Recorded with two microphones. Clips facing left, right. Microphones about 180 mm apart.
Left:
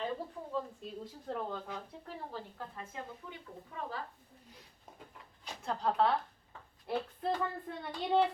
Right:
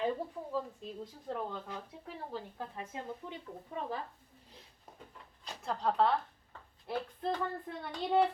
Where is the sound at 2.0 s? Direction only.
15° right (ahead or behind).